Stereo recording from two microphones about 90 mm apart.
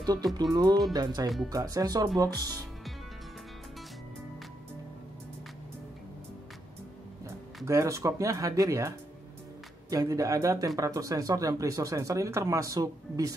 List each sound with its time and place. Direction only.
0.0 s speech: 45° right (ahead or behind)
7.2 s speech: 35° right (ahead or behind)